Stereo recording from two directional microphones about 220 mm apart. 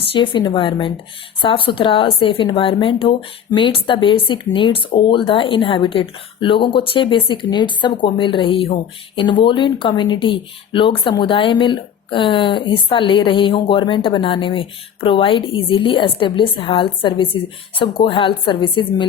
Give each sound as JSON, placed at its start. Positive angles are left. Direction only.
{"t": 0.1, "sound": "speech", "side_deg": 20}